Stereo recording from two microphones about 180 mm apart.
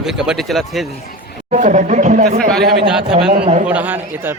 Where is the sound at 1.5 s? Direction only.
45° right (ahead or behind).